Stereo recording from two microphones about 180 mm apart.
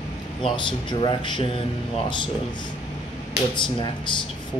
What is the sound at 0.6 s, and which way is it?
Speech, 25° left (ahead or behind).